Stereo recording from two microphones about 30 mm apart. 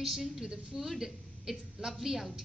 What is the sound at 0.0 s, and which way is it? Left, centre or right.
A woman's voice, centre.